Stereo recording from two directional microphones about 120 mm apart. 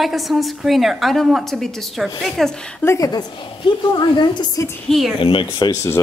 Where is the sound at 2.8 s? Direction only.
20° left (ahead or behind).